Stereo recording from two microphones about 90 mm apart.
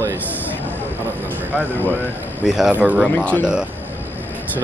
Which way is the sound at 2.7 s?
15° right (ahead or behind).